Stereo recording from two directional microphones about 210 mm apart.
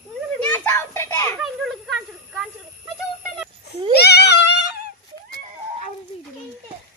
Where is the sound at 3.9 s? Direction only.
50° left (ahead or behind).